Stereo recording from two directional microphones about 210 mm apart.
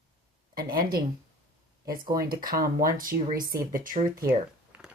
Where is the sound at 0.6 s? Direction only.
45° right (ahead or behind).